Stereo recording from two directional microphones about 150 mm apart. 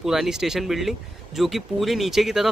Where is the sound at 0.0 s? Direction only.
5° right (ahead or behind).